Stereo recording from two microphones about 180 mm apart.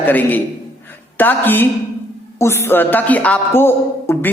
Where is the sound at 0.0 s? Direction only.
10° left (ahead or behind).